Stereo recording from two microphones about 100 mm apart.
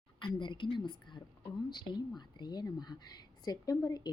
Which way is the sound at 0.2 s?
55° left (ahead or behind).